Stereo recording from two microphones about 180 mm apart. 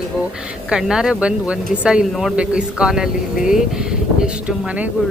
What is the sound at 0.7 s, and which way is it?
Speech, 5° right (ahead or behind).